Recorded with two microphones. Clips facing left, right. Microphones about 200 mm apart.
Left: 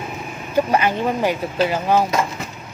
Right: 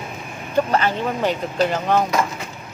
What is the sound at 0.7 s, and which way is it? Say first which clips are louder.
Speech: left 2 dB; 15° left (ahead or behind).